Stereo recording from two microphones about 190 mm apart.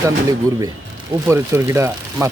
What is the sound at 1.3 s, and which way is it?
Speech, 15° right (ahead or behind).